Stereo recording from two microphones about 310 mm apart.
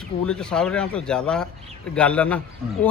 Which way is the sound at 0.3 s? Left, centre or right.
Centre.